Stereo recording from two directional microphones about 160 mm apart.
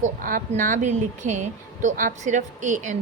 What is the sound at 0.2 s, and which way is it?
Speech, 60° right (ahead or behind).